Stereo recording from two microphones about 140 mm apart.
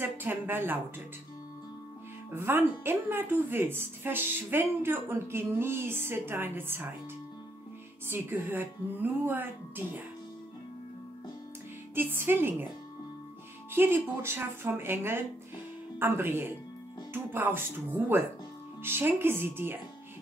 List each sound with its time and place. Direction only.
0.0 s speech: 15° right (ahead or behind)
2.3 s speech: 15° right (ahead or behind)
8.1 s speech: 15° right (ahead or behind)
11.9 s speech: 15° right (ahead or behind)
13.7 s speech: 15° right (ahead or behind)